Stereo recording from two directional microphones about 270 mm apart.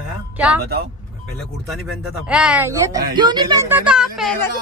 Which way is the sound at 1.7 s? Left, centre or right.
Centre.